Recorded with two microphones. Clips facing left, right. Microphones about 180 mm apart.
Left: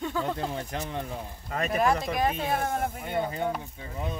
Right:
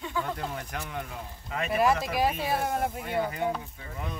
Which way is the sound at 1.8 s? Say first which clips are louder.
Right 1 dB; 5° right (ahead or behind).